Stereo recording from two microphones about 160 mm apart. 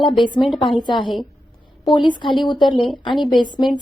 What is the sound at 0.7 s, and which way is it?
Speech, 30° left (ahead or behind).